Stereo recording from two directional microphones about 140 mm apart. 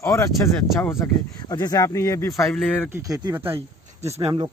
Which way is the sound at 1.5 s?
30° left (ahead or behind).